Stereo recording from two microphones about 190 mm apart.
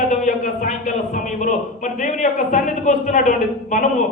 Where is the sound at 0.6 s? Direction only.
40° left (ahead or behind).